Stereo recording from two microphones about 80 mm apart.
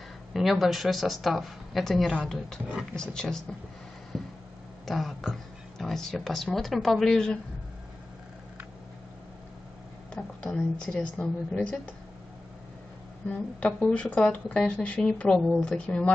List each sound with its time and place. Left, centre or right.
0.3 s speech: centre
4.1 s vehicle: centre
4.8 s speech: centre
10.1 s speech: centre
13.3 s speech: centre